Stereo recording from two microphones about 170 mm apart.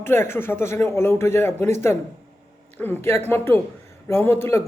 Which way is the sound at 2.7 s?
10° left (ahead or behind).